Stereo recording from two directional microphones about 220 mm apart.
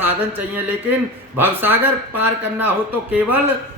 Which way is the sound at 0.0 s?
10° right (ahead or behind).